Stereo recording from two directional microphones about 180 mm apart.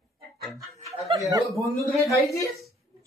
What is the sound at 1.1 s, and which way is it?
Speech, 30° right (ahead or behind).